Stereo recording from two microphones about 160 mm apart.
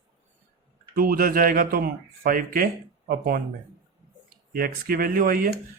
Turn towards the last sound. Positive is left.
turn(degrees=-65)  # may be behind; listen again after turning